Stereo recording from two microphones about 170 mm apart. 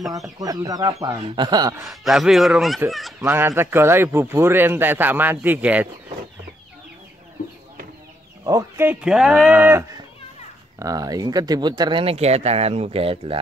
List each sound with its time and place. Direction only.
0.4 s a man's voice: 20° right (ahead or behind)
1.9 s a man's voice: centre (ahead or behind)
3.2 s a man's voice: 15° right (ahead or behind)
8.5 s a man's voice: 15° right (ahead or behind); by 13.4 s 35° right (ahead or behind)